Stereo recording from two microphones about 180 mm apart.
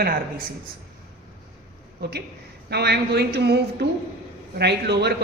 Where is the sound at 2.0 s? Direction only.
65° right (ahead or behind).